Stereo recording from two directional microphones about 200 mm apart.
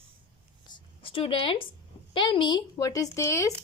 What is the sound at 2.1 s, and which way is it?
Speech, 25° left (ahead or behind).